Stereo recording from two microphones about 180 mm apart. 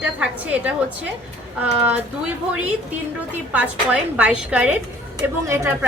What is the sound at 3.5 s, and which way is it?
A woman's voice, 5° right (ahead or behind).